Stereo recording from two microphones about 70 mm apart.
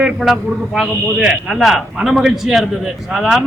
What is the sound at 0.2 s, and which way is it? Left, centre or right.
A man's voice, centre.